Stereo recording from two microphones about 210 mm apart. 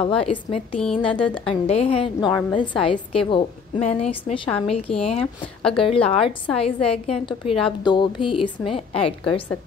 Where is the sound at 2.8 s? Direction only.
25° left (ahead or behind).